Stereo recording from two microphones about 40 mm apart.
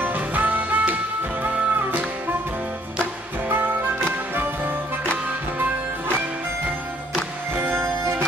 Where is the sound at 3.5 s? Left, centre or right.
Right.